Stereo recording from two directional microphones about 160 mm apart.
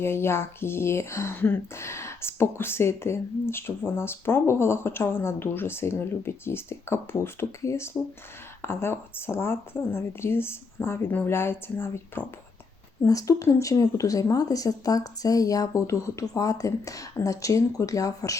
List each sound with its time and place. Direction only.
0.0 s speech: 15° left (ahead or behind)